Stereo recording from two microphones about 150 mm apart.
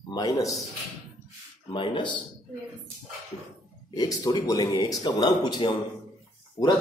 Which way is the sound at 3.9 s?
25° left (ahead or behind).